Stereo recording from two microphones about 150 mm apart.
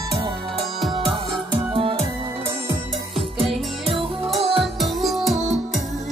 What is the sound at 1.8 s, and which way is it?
Music, 40° right (ahead or behind).